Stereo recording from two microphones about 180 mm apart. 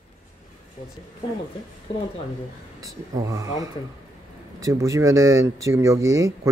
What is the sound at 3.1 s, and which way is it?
Speech, 20° right (ahead or behind).